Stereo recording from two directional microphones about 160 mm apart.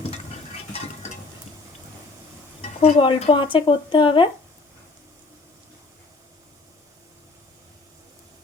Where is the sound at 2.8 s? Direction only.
35° left (ahead or behind).